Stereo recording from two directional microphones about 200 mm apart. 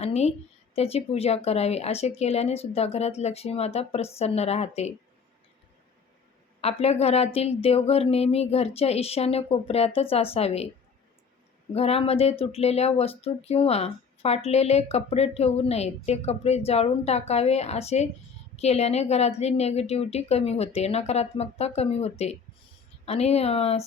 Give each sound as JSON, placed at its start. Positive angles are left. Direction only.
{"t": 0.0, "sound": "speech", "side_deg": 30}
{"t": 6.6, "sound": "speech", "side_deg": 30}
{"t": 11.7, "sound": "speech", "side_deg": 30}